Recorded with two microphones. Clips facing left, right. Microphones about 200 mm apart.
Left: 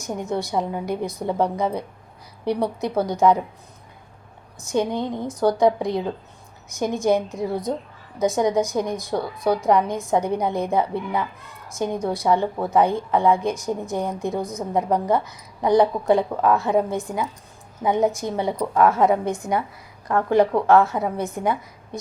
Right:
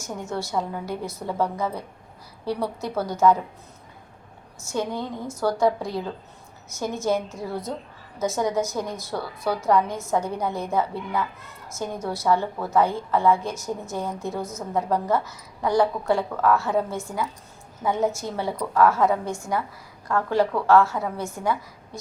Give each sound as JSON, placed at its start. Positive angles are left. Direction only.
{"t": 0.0, "sound": "a woman's voice", "side_deg": 15}
{"t": 4.6, "sound": "a woman's voice", "side_deg": 15}